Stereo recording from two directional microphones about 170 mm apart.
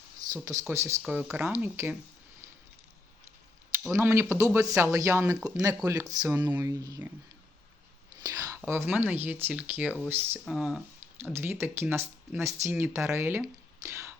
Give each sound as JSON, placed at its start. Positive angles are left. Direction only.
{"t": 0.7, "sound": "speech", "side_deg": -15}
{"t": 1.0, "sound": "speech", "side_deg": -5}
{"t": 3.9, "sound": "speech", "side_deg": -15}
{"t": 8.2, "sound": "speech", "side_deg": -20}
{"t": 10.4, "sound": "speech", "side_deg": 0}
{"t": 11.2, "sound": "speech", "side_deg": -15}